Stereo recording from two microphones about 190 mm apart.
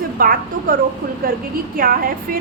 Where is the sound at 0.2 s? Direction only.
50° right (ahead or behind).